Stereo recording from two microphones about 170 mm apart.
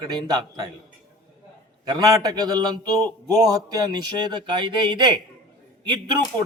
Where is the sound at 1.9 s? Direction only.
25° right (ahead or behind).